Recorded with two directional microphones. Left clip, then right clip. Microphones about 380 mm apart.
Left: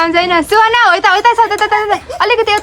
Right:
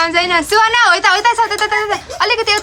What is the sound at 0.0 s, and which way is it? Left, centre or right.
A woman's voice, centre.